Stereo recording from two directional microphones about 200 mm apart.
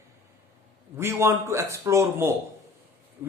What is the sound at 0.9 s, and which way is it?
A man's voice, 15° right (ahead or behind).